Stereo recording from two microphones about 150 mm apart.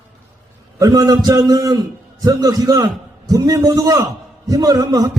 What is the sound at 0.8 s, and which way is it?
A man's voice, 25° right (ahead or behind).